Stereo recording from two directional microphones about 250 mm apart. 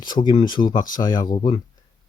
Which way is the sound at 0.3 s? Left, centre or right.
Centre.